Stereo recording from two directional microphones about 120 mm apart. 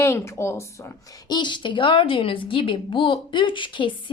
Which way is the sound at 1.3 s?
40° left (ahead or behind).